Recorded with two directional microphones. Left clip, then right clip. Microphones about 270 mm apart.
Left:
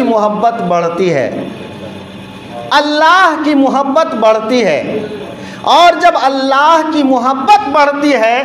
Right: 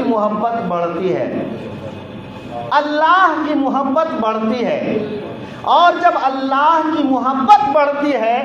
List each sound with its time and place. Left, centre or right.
0.1 s a man's voice: left
2.7 s a man's voice: left